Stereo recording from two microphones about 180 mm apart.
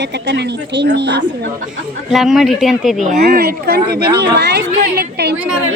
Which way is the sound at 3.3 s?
60° right (ahead or behind).